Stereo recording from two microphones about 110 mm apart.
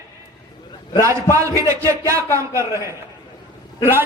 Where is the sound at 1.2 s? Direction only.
30° right (ahead or behind).